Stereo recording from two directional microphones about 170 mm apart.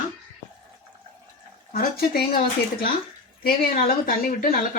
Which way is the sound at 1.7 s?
60° left (ahead or behind).